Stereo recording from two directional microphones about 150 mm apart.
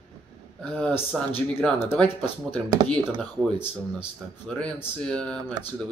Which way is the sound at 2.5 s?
5° left (ahead or behind).